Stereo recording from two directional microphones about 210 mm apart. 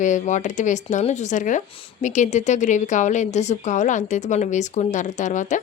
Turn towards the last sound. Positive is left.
turn(degrees=35)  # may be behind; listen again after turning